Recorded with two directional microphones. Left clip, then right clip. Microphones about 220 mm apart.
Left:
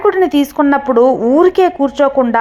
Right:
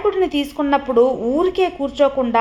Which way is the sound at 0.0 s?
25° left (ahead or behind).